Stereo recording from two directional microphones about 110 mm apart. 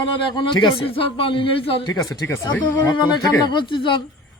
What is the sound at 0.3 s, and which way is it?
A man's voice, 45° left (ahead or behind).